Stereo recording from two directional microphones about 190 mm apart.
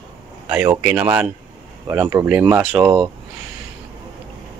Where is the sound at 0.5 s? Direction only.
10° right (ahead or behind).